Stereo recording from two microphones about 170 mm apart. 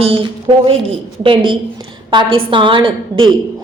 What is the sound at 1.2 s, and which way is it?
A woman's voice, 30° right (ahead or behind).